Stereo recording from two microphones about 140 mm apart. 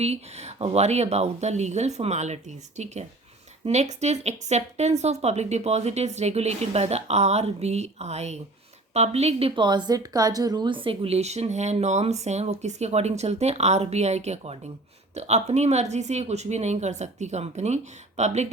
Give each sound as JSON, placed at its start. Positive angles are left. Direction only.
{"t": 0.0, "sound": "speech", "side_deg": -50}
{"t": 9.6, "sound": "speech", "side_deg": -30}